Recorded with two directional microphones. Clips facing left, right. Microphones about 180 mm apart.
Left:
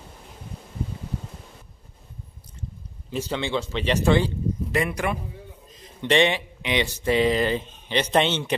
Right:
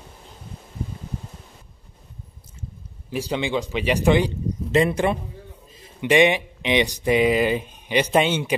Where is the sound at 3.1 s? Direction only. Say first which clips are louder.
Right 2 dB; 15° right (ahead or behind).